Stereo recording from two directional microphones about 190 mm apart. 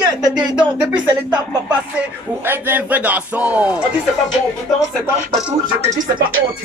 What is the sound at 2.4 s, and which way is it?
Speech, 10° right (ahead or behind).